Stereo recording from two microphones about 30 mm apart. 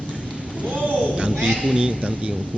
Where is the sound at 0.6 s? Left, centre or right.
Right.